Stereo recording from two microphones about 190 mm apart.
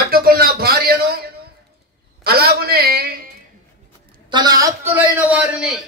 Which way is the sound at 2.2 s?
55° right (ahead or behind).